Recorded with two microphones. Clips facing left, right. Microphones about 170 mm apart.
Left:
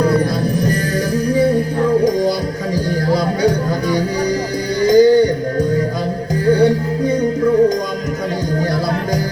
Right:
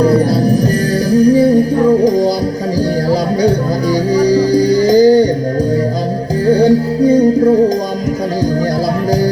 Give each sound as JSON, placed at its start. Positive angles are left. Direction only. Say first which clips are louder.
{"t": 0.0, "sound": "music", "louder": "right 5 dB", "side_deg": -35}
{"t": 3.9, "sound": "music", "louder": "right 10 dB", "side_deg": -35}
{"t": 6.4, "sound": "music", "louder": "right 3 dB", "side_deg": -35}